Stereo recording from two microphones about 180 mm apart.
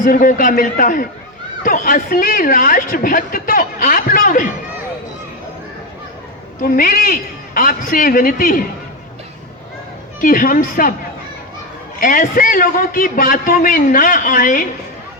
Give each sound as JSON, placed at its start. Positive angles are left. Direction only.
{"t": 0.0, "sound": "a woman's voice", "side_deg": 50}
{"t": 6.6, "sound": "a woman's voice", "side_deg": 50}
{"t": 10.2, "sound": "a woman's voice", "side_deg": 50}
{"t": 11.9, "sound": "a woman's voice", "side_deg": 50}